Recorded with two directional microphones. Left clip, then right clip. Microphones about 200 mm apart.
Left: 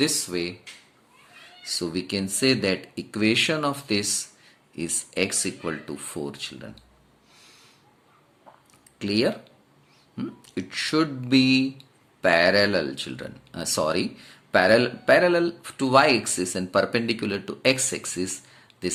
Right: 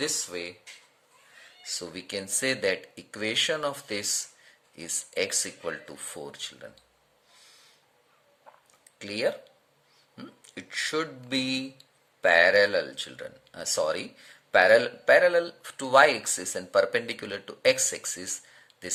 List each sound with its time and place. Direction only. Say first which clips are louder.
0.0 s speech: left 6 dB; 10° right (ahead or behind)
1.6 s speech: left 8 dB; 15° right (ahead or behind)
9.0 s speech: left 4 dB; 10° right (ahead or behind)